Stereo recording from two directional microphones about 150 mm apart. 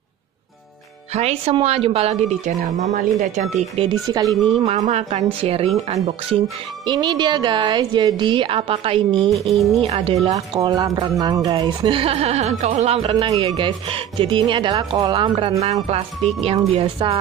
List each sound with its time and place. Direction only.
1.1 s a woman's voice: 45° right (ahead or behind)
4.1 s speech: 25° right (ahead or behind)
4.6 s a woman's voice: 45° right (ahead or behind)
6.9 s a woman's voice: 30° right (ahead or behind)
9.3 s speech: centre (ahead or behind)
9.8 s a woman's voice: 40° right (ahead or behind)
10.3 s a woman's voice: 25° right (ahead or behind)
15.6 s a woman's voice: 45° right (ahead or behind)